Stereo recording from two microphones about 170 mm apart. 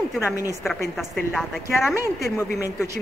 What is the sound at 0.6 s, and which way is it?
A woman's voice, centre (ahead or behind).